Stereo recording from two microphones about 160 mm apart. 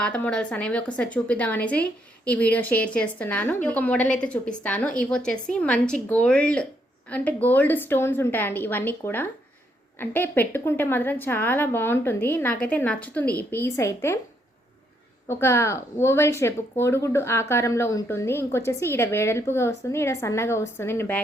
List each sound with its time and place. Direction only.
0.0 s speech: 5° left (ahead or behind)
15.3 s speech: 15° left (ahead or behind)